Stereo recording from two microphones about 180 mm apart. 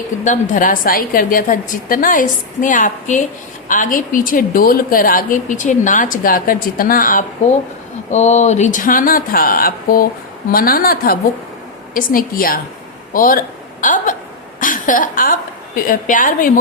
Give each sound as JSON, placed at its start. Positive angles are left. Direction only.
{"t": 0.3, "sound": "a woman's voice", "side_deg": 45}